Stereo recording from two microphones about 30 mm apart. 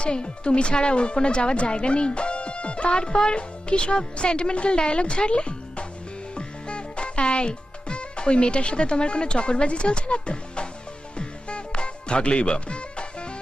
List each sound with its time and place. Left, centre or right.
0.0 s speech: left
6.3 s music: left